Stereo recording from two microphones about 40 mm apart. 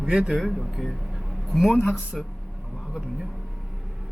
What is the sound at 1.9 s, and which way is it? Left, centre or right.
Speech, right.